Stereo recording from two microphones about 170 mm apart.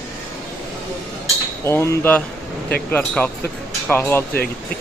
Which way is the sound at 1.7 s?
15° left (ahead or behind).